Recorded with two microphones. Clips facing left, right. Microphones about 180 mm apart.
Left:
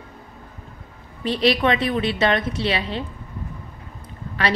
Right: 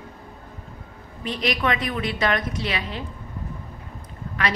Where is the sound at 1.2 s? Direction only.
30° left (ahead or behind).